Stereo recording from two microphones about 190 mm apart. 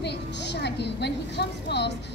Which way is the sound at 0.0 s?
60° left (ahead or behind).